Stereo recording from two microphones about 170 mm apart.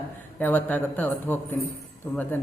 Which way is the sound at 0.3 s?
10° left (ahead or behind).